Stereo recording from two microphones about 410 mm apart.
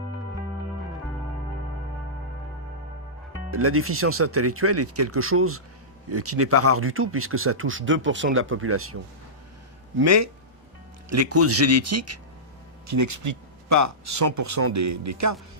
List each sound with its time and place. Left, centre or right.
3.5 s speech: right
10.0 s speech: right